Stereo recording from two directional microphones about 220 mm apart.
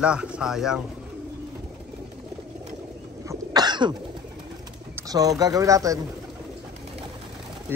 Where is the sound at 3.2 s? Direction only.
20° right (ahead or behind).